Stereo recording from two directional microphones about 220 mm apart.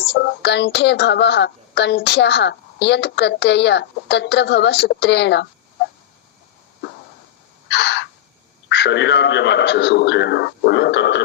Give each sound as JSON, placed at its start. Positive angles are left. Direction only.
{"t": 0.1, "sound": "speech", "side_deg": 50}
{"t": 7.7, "sound": "a sound", "side_deg": 50}
{"t": 8.7, "sound": "speech", "side_deg": 50}